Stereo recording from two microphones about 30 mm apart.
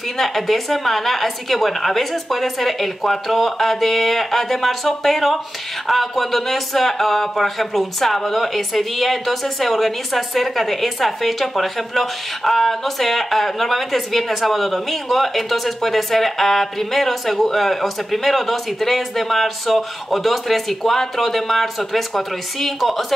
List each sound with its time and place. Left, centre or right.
0.2 s speech: centre